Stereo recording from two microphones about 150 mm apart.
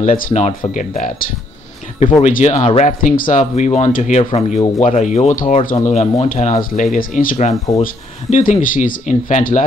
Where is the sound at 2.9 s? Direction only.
60° left (ahead or behind).